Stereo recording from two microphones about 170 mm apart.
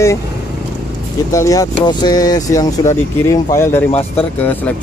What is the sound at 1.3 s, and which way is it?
Speech, 20° left (ahead or behind).